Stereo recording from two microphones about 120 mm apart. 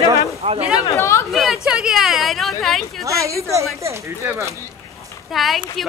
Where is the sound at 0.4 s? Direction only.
55° right (ahead or behind).